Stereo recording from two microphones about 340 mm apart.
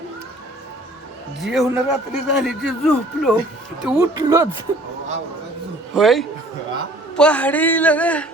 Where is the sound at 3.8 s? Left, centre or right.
Centre.